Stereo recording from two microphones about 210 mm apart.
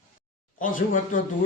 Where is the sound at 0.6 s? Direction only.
40° left (ahead or behind).